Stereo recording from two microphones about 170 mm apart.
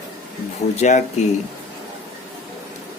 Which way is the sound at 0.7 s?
45° left (ahead or behind).